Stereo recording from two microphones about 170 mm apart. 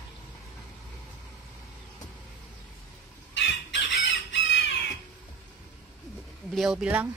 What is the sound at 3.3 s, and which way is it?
Chicken, 90° left.